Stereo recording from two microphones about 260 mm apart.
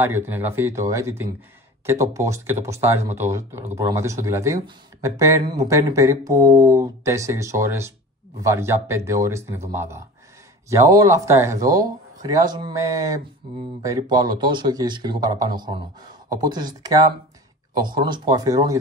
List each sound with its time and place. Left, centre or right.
0.0 s speech: centre